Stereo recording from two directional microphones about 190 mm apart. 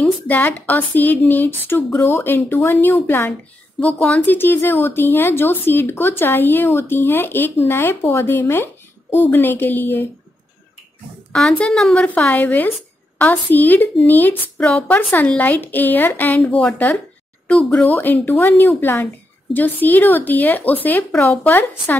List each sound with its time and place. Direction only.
0.0 s speech: 10° left (ahead or behind)
11.3 s a woman's voice: 5° left (ahead or behind)